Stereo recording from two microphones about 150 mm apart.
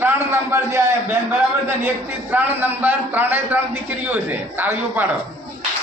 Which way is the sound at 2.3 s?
10° right (ahead or behind).